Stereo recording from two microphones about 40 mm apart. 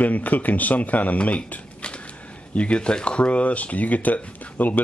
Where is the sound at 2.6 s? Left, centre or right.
Left.